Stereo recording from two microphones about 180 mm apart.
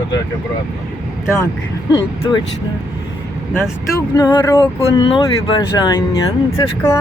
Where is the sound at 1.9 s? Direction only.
25° left (ahead or behind).